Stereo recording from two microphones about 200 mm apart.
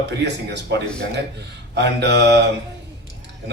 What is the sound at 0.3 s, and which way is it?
A man's voice, 60° right (ahead or behind).